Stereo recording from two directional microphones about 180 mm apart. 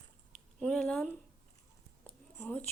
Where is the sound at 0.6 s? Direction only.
5° left (ahead or behind).